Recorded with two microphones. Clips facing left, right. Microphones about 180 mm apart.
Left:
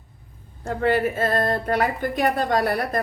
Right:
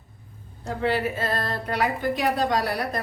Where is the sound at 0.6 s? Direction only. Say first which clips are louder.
Left 4 dB; 50° left (ahead or behind).